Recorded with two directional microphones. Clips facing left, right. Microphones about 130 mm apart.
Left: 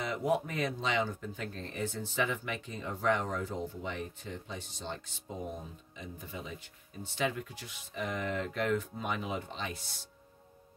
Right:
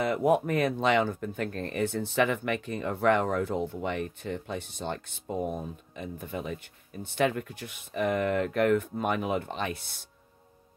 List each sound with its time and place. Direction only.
0.0 s speech: 55° right (ahead or behind)